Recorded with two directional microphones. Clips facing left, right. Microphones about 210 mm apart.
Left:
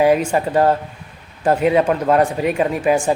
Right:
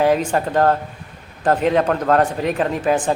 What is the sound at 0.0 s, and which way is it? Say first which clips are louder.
Speech: left 2 dB; 10° left (ahead or behind).